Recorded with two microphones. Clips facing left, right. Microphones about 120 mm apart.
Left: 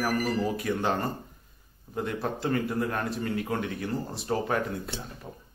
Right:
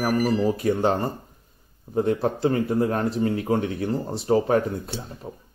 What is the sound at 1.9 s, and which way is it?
Speech, 35° right (ahead or behind).